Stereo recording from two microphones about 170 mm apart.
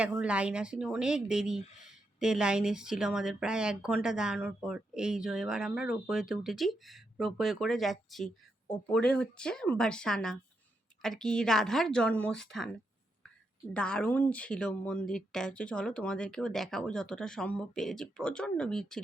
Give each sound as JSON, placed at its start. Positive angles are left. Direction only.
{"t": 0.0, "sound": "speech", "side_deg": -5}
{"t": 13.7, "sound": "speech", "side_deg": 5}